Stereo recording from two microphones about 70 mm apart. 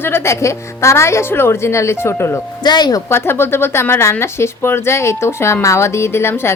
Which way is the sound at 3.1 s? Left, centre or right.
Left.